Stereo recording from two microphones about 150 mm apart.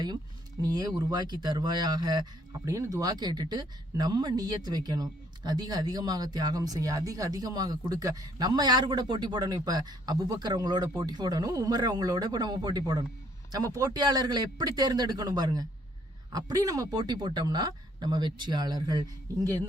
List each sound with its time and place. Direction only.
0.6 s speech: 25° right (ahead or behind)